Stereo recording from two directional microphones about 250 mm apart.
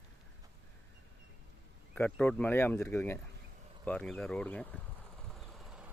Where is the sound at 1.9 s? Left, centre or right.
Centre.